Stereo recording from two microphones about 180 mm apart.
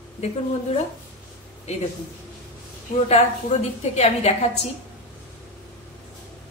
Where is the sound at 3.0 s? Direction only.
35° left (ahead or behind).